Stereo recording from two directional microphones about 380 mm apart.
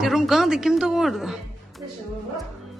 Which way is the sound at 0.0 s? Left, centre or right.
Centre.